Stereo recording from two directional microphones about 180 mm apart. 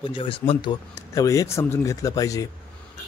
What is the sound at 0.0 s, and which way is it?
A man's voice, 30° left (ahead or behind).